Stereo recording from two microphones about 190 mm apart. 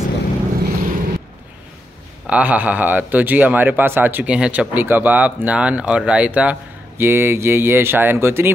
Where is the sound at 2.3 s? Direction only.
5° right (ahead or behind).